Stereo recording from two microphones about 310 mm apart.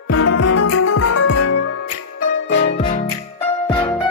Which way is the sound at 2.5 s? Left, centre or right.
Left.